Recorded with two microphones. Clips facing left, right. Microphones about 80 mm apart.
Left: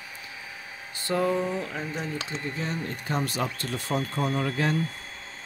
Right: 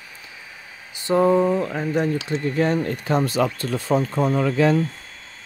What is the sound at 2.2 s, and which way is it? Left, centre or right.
Speech, right.